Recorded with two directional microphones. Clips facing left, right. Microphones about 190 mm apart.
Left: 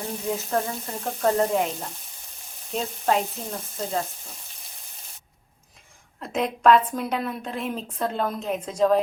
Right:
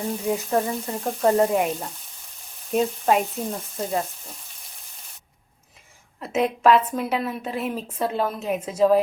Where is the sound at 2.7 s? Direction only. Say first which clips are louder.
Right 4 dB; 10° right (ahead or behind).